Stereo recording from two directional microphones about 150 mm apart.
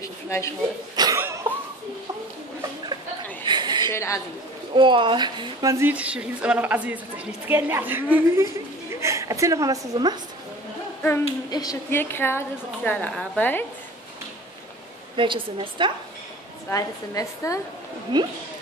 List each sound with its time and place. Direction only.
0.0 s a sound: 20° left (ahead or behind)
0.9 s cough: 25° right (ahead or behind)
3.4 s a sound: 30° right (ahead or behind)
3.9 s a woman's voice: 20° left (ahead or behind)
4.7 s a woman's voice: 35° right (ahead or behind)
11.5 s a woman's voice: 25° left (ahead or behind)
12.0 s a woman's voice: 15° left (ahead or behind)
15.1 s a woman's voice: 35° right (ahead or behind)
16.7 s a woman's voice: 20° left (ahead or behind)
18.1 s speech: 30° right (ahead or behind)